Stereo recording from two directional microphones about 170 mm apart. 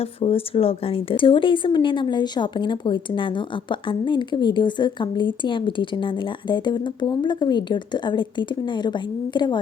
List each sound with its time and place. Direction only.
0.0 s speech: 35° left (ahead or behind)